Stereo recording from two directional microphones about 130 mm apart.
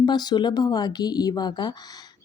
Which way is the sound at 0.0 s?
35° left (ahead or behind).